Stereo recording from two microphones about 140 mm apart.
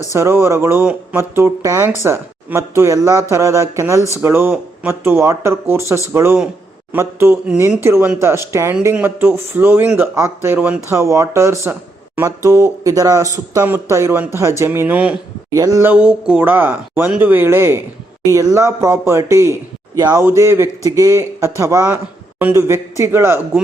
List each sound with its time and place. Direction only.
0.1 s speech: 20° right (ahead or behind)
15.5 s speech: 25° right (ahead or behind)